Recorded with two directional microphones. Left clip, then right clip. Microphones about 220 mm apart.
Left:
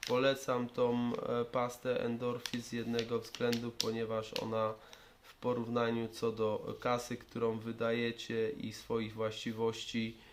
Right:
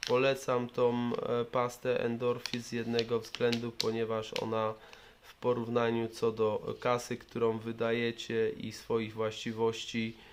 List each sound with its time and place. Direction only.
0.0 s speech: 25° right (ahead or behind)